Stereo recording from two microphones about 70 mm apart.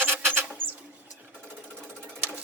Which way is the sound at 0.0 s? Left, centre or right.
Right.